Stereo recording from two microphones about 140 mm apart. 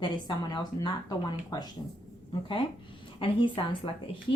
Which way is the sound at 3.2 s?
40° left (ahead or behind).